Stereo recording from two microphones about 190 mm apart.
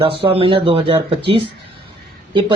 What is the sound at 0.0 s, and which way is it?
Speech, 30° right (ahead or behind).